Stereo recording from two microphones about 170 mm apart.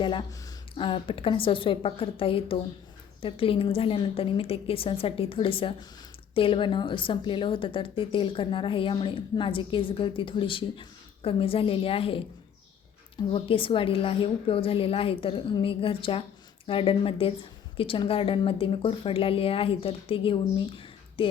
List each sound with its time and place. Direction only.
0.0 s a woman's voice: 30° left (ahead or behind)